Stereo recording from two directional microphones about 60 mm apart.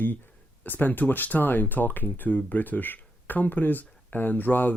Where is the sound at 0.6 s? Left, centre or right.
Left.